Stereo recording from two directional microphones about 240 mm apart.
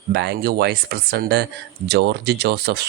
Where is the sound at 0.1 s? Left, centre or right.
Right.